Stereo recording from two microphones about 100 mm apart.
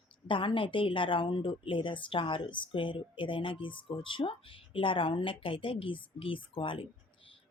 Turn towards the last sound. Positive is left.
turn(degrees=60)  # may be behind; listen again after turning